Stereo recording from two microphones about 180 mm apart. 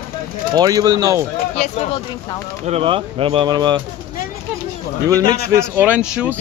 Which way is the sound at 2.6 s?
30° right (ahead or behind).